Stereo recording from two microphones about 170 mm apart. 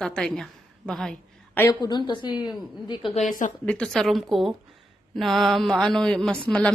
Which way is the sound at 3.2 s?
45° left (ahead or behind).